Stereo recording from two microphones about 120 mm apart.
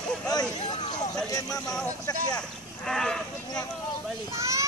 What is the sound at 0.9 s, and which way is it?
Speech, 30° left (ahead or behind).